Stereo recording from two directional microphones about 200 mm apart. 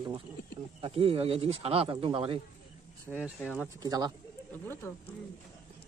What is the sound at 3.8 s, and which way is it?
Speech, 20° right (ahead or behind).